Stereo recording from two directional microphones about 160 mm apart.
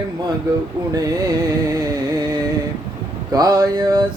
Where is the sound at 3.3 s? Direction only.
20° right (ahead or behind).